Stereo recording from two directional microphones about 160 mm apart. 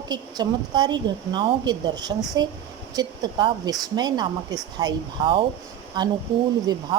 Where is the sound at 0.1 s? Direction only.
25° right (ahead or behind).